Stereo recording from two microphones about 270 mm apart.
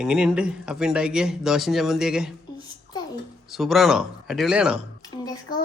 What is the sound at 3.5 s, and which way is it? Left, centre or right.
Speech, centre.